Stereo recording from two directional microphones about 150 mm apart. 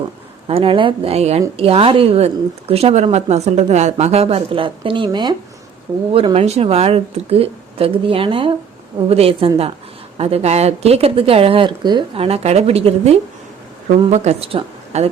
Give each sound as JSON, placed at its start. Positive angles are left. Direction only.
{"t": 0.4, "sound": "speech", "side_deg": -40}